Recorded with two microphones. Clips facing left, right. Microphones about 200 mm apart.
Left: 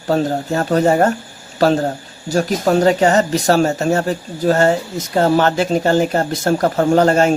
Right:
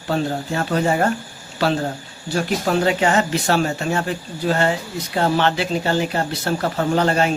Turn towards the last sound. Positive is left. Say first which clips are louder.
# left 6 dB
turn(degrees=45)  # may be behind; listen again after turning